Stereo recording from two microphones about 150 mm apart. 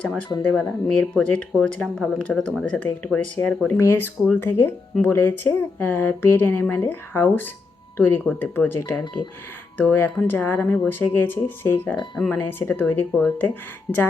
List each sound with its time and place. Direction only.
0.0 s speech: 5° left (ahead or behind)
9.2 s speech: 35° left (ahead or behind)
9.7 s speech: 15° left (ahead or behind)
12.1 s speech: 5° left (ahead or behind)
12.4 s speech: 15° left (ahead or behind)